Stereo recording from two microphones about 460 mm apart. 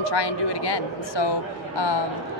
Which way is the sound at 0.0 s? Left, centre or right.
Left.